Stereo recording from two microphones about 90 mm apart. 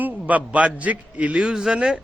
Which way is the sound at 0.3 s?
15° right (ahead or behind).